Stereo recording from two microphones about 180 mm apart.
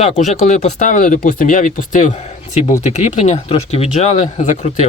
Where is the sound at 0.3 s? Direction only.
40° left (ahead or behind).